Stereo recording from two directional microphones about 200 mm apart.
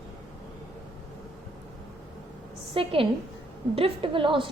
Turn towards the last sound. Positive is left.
turn(degrees=-25)  # may be behind; listen again after turning